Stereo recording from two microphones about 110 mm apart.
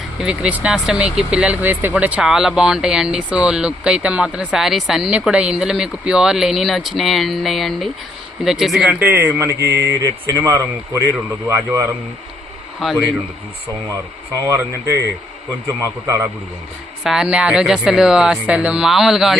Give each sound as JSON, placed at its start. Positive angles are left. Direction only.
{"t": 0.2, "sound": "speech", "side_deg": -10}
{"t": 9.0, "sound": "speech", "side_deg": -20}
{"t": 12.8, "sound": "speech", "side_deg": 0}
{"t": 14.4, "sound": "speech", "side_deg": -25}
{"t": 17.0, "sound": "speech", "side_deg": -5}